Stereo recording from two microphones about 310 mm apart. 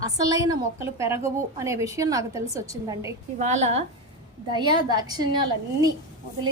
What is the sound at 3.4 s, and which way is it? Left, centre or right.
A woman's voice, right.